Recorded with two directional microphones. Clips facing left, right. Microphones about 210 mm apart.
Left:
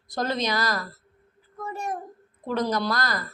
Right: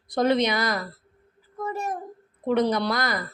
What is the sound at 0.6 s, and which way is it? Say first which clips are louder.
Speech: right 1 dB; 20° right (ahead or behind).